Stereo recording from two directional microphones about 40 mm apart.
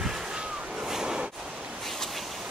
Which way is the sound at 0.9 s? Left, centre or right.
Centre.